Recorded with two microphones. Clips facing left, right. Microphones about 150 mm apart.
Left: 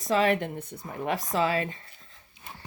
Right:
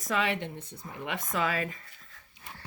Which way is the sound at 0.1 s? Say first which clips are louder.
Left 6 dB; 40° left (ahead or behind).